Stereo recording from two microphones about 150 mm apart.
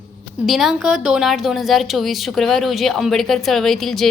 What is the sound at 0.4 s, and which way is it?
A woman's voice, centre (ahead or behind).